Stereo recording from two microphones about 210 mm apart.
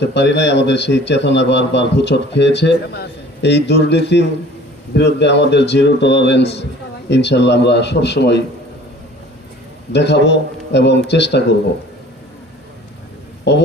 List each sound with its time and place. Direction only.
0.0 s a man's voice: 55° left (ahead or behind)
9.9 s a man's voice: 55° left (ahead or behind)
13.5 s speech: 55° left (ahead or behind)